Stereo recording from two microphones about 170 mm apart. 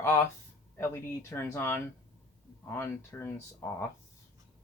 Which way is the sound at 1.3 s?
15° left (ahead or behind).